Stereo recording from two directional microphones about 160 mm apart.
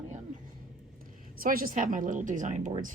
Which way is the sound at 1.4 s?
60° right (ahead or behind).